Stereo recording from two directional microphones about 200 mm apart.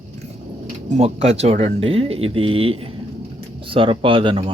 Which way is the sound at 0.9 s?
30° right (ahead or behind).